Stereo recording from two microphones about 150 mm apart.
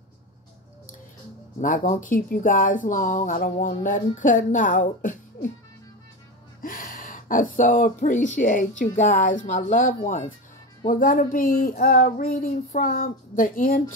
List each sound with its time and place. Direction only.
1.6 s speech: 60° left (ahead or behind)
6.6 s speech: 65° left (ahead or behind)